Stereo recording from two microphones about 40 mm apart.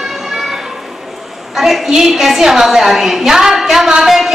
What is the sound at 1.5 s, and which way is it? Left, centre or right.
A woman's voice, centre.